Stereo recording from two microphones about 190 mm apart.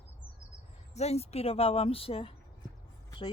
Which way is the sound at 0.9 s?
35° left (ahead or behind).